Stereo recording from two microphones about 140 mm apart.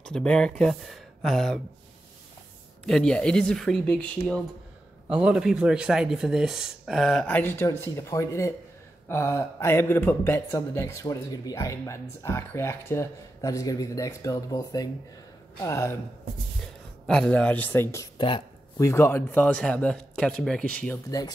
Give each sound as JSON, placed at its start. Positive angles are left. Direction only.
{"t": 0.0, "sound": "speech", "side_deg": 5}
{"t": 2.9, "sound": "speech", "side_deg": 5}
{"t": 5.1, "sound": "speech", "side_deg": -5}
{"t": 17.0, "sound": "speech", "side_deg": 5}
{"t": 18.1, "sound": "speech", "side_deg": 35}
{"t": 18.8, "sound": "speech", "side_deg": 20}